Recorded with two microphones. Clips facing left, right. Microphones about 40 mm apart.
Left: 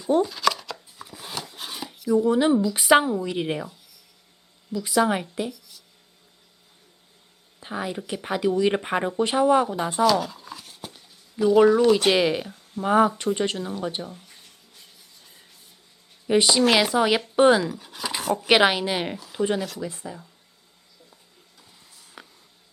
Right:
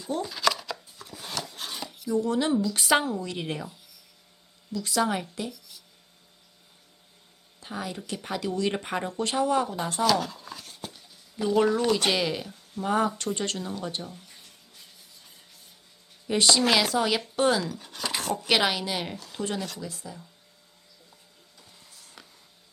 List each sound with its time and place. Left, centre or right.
0.2 s chopping: centre
2.1 s speech: centre
4.7 s speech: centre
5.5 s a sound: centre
7.6 s speech: centre
10.0 s a sound: centre
12.1 s speech: centre
16.2 s speech: centre
17.7 s speech: centre
18.4 s speech: left
19.1 s speech: centre
19.8 s speech: left
21.6 s a sound: centre